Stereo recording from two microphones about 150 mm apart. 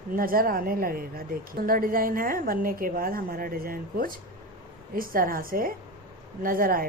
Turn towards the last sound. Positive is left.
turn(degrees=-70)  # may be behind; listen again after turning